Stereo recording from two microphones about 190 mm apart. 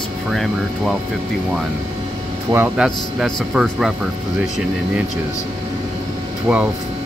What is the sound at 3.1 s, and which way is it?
Speech, centre (ahead or behind).